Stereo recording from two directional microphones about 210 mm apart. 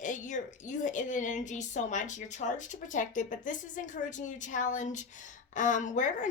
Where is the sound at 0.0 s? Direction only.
35° left (ahead or behind).